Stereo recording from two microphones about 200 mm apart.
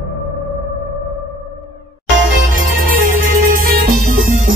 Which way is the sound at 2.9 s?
80° right.